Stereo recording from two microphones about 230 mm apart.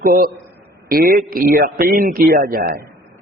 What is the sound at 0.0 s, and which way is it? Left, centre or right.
A man's voice, right.